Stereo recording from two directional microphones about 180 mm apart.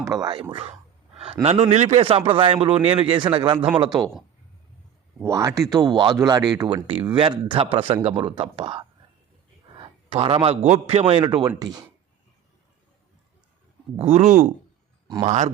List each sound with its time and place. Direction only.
0.0 s a man's voice: 20° right (ahead or behind)
3.8 s speech: centre (ahead or behind)
5.2 s a man's voice: 15° right (ahead or behind)
13.9 s a man's voice: 35° right (ahead or behind)